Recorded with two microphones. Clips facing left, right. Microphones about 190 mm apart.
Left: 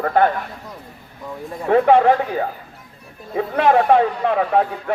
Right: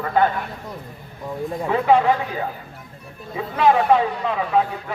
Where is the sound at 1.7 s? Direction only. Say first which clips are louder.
Left 4 dB; 55° left (ahead or behind).